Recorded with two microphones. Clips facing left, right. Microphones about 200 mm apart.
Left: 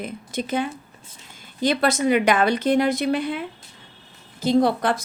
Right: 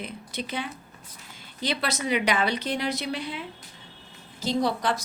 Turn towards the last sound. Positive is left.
turn(degrees=55)  # may be behind; listen again after turning